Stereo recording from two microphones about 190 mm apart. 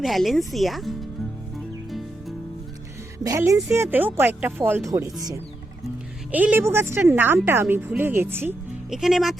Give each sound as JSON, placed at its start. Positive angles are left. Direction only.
{"t": 0.0, "sound": "speech", "side_deg": 0}
{"t": 3.2, "sound": "speech", "side_deg": -15}